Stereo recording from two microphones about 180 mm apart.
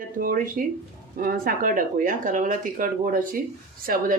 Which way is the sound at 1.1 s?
55° right (ahead or behind).